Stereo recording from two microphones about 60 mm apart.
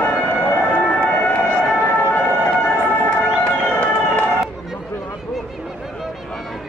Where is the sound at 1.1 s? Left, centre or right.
Left.